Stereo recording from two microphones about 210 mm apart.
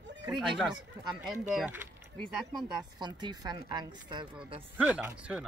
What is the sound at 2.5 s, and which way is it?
Speech, 20° right (ahead or behind).